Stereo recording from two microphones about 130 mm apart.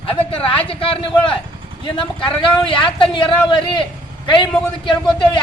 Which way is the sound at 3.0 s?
40° left (ahead or behind).